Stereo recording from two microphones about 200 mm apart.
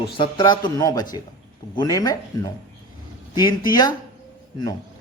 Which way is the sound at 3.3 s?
20° left (ahead or behind).